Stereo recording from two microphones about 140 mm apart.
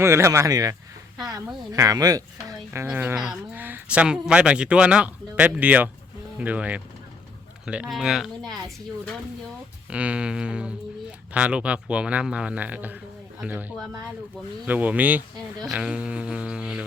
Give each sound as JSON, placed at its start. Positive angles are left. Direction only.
{"t": 0.0, "sound": "speech", "side_deg": -20}
{"t": 2.7, "sound": "speech", "side_deg": -10}
{"t": 9.9, "sound": "speech", "side_deg": -10}
{"t": 15.5, "sound": "speech", "side_deg": 0}